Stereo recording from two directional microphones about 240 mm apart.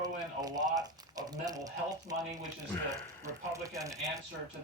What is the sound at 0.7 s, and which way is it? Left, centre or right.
Speech, centre.